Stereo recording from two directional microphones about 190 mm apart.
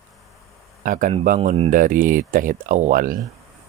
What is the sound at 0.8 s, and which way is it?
Speech, 45° right (ahead or behind).